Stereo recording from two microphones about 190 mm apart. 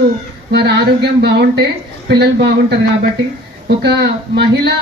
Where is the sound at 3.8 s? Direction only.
65° right (ahead or behind).